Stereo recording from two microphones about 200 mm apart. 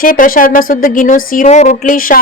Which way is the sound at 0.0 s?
45° left (ahead or behind).